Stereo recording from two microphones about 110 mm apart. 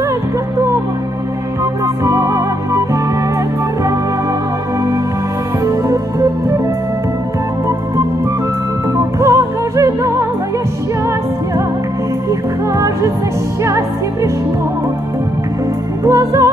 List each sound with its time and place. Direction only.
1.6 s music: 30° right (ahead or behind)
5.7 s music: 30° right (ahead or behind)
9.2 s music: 30° right (ahead or behind)
12.3 s music: 30° right (ahead or behind)
16.0 s music: 30° right (ahead or behind)